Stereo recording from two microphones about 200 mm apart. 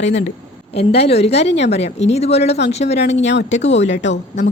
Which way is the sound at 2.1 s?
30° left (ahead or behind).